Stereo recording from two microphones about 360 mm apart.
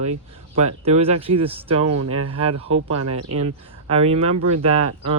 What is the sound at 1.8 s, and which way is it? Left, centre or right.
Speech, right.